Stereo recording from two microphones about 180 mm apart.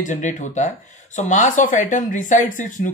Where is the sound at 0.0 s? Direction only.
45° left (ahead or behind).